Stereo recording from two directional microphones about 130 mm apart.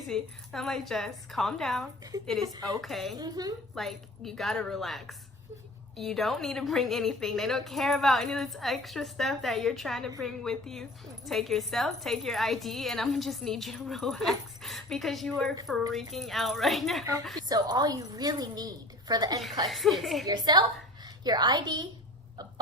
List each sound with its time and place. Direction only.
0.1 s a woman's voice: 5° left (ahead or behind)
2.1 s a woman's voice: 30° right (ahead or behind)
2.8 s a woman's voice: centre (ahead or behind)
3.2 s a woman's voice: 30° right (ahead or behind)
3.8 s a woman's voice: centre (ahead or behind)
17.5 s a woman's voice: 30° right (ahead or behind)
19.6 s a woman's voice: centre (ahead or behind)
20.2 s a woman's voice: 30° right (ahead or behind)